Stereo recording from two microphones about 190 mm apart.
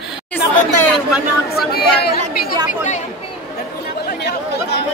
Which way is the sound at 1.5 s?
55° left (ahead or behind).